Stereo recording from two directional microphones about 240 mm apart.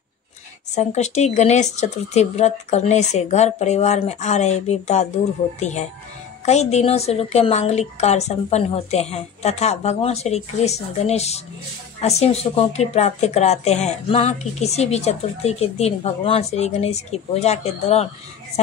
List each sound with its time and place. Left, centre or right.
0.7 s a woman's voice: left